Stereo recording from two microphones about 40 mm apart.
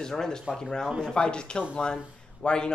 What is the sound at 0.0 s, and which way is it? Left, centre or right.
A man's voice, centre.